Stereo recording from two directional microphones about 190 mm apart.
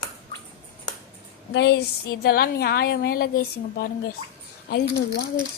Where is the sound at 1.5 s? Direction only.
60° left (ahead or behind).